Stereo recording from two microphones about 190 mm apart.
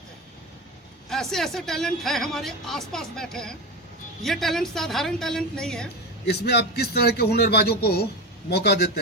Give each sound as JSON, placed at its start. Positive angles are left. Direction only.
{"t": 1.1, "sound": "speech", "side_deg": 0}
{"t": 6.2, "sound": "a man's voice", "side_deg": 60}